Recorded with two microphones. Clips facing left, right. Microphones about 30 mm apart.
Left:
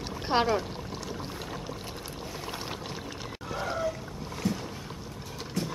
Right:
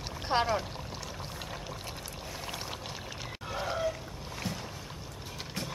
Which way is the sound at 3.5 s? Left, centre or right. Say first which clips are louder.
Left 1 dB; centre.